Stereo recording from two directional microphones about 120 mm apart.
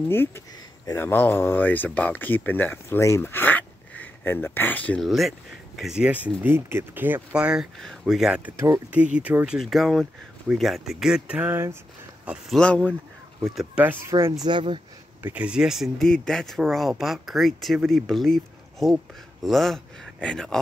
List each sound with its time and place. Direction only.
0.1 s speech: 20° left (ahead or behind)
5.0 s speech: centre (ahead or behind); by 7.2 s 20° right (ahead or behind)
7.3 s speech: 5° right (ahead or behind)
9.6 s speech: centre (ahead or behind); by 11.7 s 15° right (ahead or behind)
12.4 s speech: 5° left (ahead or behind)
13.7 s speech: 15° right (ahead or behind)
14.4 s speech: 40° right (ahead or behind)
15.2 s speech: 10° right (ahead or behind); by 20.6 s 5° left (ahead or behind)